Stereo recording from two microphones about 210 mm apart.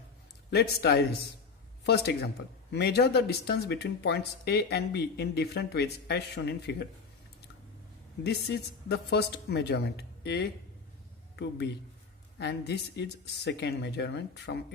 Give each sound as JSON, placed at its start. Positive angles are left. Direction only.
{"t": 0.5, "sound": "speech", "side_deg": 50}
{"t": 8.2, "sound": "speech", "side_deg": 50}